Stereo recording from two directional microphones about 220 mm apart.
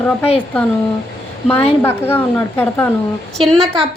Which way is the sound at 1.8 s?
10° left (ahead or behind).